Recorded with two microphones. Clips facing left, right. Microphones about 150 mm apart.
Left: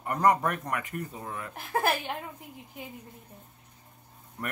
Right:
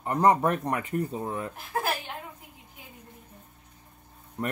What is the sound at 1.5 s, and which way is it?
Speech, 60° left (ahead or behind).